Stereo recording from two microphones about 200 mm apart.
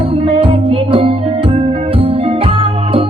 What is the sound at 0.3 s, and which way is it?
Music, 25° right (ahead or behind).